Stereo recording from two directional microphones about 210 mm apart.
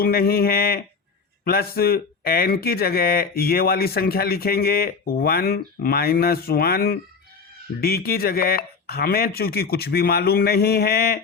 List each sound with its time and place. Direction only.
0.0 s speech: 45° left (ahead or behind)